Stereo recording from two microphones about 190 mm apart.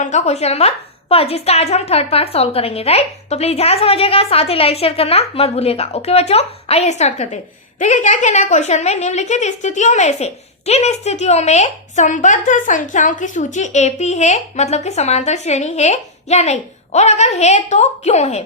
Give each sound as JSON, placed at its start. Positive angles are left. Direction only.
{"t": 0.0, "sound": "a woman's voice", "side_deg": 35}